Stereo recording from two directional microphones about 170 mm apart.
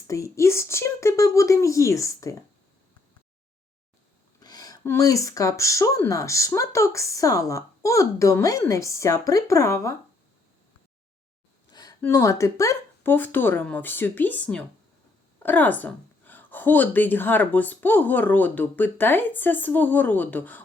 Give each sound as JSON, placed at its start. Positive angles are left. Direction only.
{"t": 0.1, "sound": "a woman's voice", "side_deg": 15}
{"t": 4.4, "sound": "speech", "side_deg": 20}
{"t": 11.7, "sound": "a sound", "side_deg": 25}
{"t": 12.0, "sound": "a woman's voice", "side_deg": 20}